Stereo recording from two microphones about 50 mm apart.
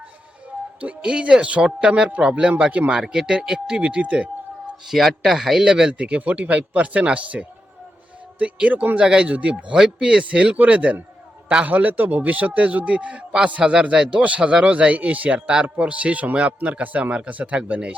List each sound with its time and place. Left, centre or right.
0.8 s speech: right
4.9 s a man's voice: centre
5.9 s speech: right
9.0 s speech: centre
9.7 s speech: centre
16.5 s speech: right
16.7 s speech: right